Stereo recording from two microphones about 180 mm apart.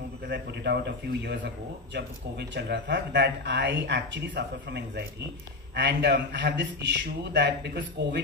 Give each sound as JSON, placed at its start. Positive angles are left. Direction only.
{"t": 0.3, "sound": "speech", "side_deg": -70}